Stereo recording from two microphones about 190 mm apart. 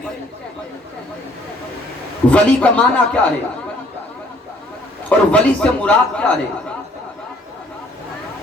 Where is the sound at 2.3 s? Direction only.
5° left (ahead or behind).